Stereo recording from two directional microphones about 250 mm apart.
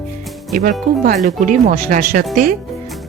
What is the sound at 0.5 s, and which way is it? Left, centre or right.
Speech, right.